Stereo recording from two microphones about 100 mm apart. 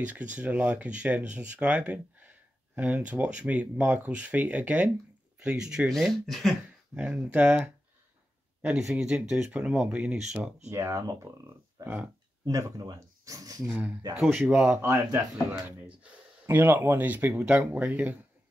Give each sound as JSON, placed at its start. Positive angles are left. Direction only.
{"t": 0.0, "sound": "speech", "side_deg": -15}
{"t": 5.9, "sound": "speech", "side_deg": 0}
{"t": 7.0, "sound": "speech", "side_deg": -10}
{"t": 10.7, "sound": "speech", "side_deg": -30}
{"t": 11.8, "sound": "speech", "side_deg": -15}
{"t": 12.4, "sound": "speech", "side_deg": -35}
{"t": 13.7, "sound": "speech", "side_deg": -10}
{"t": 16.4, "sound": "speech", "side_deg": -20}